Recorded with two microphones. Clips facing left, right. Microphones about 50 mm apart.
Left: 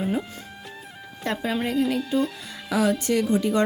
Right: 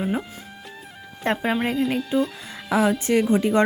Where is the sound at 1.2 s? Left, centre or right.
Right.